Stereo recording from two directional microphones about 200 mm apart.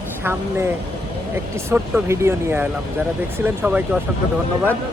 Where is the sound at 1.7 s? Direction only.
10° right (ahead or behind).